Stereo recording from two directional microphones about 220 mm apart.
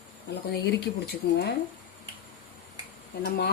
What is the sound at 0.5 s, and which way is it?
Speech, 50° left (ahead or behind).